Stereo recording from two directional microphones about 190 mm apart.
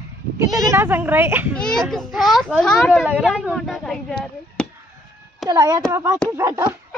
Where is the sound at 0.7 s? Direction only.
10° right (ahead or behind).